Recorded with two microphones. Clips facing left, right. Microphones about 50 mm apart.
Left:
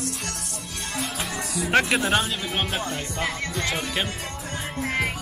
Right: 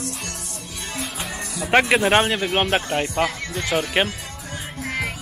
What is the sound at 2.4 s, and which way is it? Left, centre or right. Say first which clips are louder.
Speech: right 6 dB; right.